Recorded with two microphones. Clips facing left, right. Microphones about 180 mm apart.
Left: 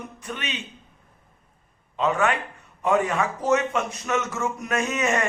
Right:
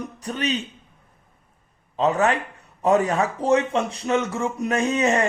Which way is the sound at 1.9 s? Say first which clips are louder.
Right 3 dB; 35° right (ahead or behind).